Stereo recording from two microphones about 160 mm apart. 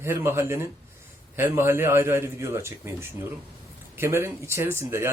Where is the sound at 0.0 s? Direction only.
15° right (ahead or behind).